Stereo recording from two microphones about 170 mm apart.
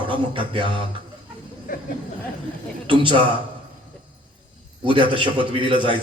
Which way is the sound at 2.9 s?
30° right (ahead or behind).